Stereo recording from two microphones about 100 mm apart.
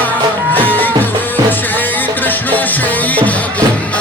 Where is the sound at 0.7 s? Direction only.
20° left (ahead or behind).